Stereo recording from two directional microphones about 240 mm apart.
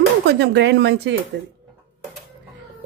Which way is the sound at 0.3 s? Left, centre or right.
Right.